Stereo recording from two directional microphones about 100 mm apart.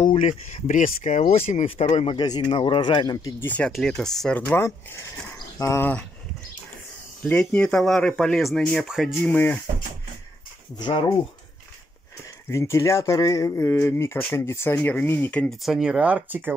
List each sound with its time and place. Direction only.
0.0 s speech: 70° left (ahead or behind)
1.3 s speech: 90° left
2.1 s speech: 45° left (ahead or behind)
3.3 s speech: 15° left (ahead or behind)
3.7 s speech: 5° left (ahead or behind)
4.6 s speech: 25° left (ahead or behind)
7.2 s speech: 10° left (ahead or behind)
9.2 s speech: 15° left (ahead or behind)
10.8 s speech: 50° left (ahead or behind)
12.4 s speech: 30° left (ahead or behind)
15.6 s speech: 5° right (ahead or behind)